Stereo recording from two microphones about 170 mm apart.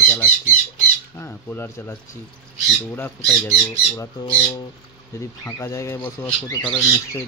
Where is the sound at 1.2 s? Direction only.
15° left (ahead or behind).